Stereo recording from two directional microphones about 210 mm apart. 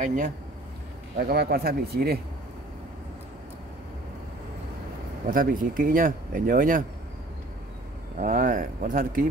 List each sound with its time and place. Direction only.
0.0 s speech: 35° right (ahead or behind)
1.1 s speech: 50° right (ahead or behind)
5.3 s speech: 40° right (ahead or behind)
8.2 s speech: 40° right (ahead or behind)